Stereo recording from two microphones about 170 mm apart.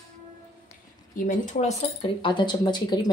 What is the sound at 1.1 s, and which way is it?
Speech, 50° left (ahead or behind).